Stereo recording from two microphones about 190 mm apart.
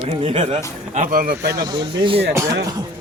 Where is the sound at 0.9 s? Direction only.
45° right (ahead or behind).